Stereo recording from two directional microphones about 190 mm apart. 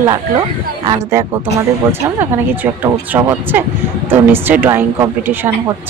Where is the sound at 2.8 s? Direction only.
10° right (ahead or behind).